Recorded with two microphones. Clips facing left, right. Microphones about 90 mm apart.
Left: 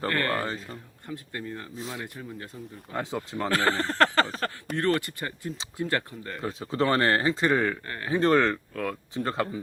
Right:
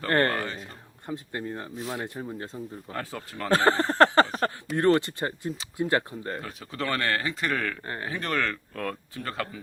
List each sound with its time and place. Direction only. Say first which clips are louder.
0.1 s speech: right 6 dB; 35° right (ahead or behind)
0.3 s speech: left 2 dB; 35° left (ahead or behind)
1.0 s speech: right 3 dB; 25° right (ahead or behind)
2.9 s speech: left 7 dB; 20° left (ahead or behind)
3.5 s a sound: right 5 dB; 20° right (ahead or behind)
4.8 s speech: right 4 dB; 20° right (ahead or behind)
6.4 s speech: left 6 dB; 25° left (ahead or behind)
7.9 s speech: right 2 dB; 25° right (ahead or behind)
8.1 s speech: left 8 dB; 30° left (ahead or behind)
8.7 s speech: left 1 dB; 5° left (ahead or behind)
9.1 s speech: left 5 dB; 25° left (ahead or behind)